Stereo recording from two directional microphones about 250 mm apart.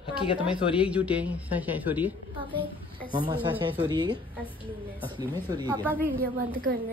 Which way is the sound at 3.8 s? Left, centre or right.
Centre.